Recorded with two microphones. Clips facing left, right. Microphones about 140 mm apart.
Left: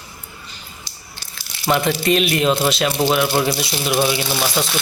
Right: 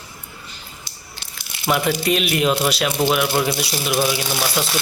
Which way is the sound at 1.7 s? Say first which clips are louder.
Left 2 dB; 5° right (ahead or behind).